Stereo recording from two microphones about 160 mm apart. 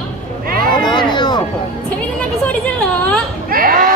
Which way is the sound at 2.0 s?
10° left (ahead or behind).